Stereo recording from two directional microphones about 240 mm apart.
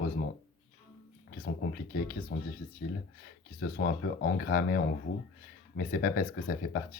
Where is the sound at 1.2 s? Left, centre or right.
Left.